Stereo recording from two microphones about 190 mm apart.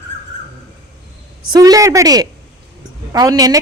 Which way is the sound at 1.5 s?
20° right (ahead or behind).